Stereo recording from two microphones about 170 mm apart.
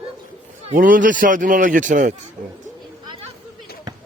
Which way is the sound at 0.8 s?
50° right (ahead or behind).